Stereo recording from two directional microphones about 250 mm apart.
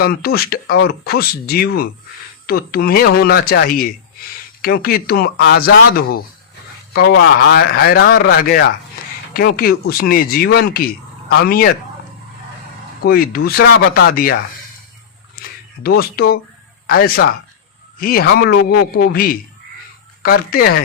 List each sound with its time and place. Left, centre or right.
0.0 s speech: left
13.0 s speech: left
15.4 s a sound: left
15.8 s speech: left